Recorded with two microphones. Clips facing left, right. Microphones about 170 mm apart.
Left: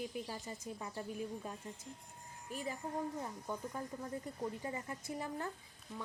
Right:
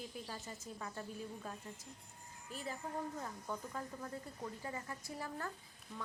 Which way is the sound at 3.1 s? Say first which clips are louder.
Left 2 dB; 15° left (ahead or behind).